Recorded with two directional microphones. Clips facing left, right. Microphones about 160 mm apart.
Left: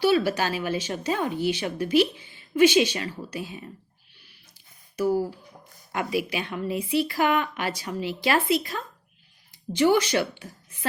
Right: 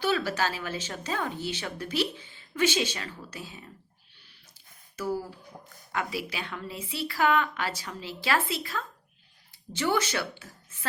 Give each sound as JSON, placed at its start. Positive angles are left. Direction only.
{"t": 0.0, "sound": "speech", "side_deg": 10}
{"t": 5.9, "sound": "speech", "side_deg": 15}